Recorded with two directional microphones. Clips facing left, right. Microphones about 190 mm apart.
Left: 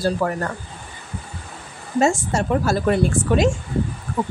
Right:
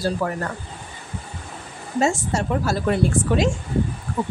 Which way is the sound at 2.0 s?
50° left (ahead or behind).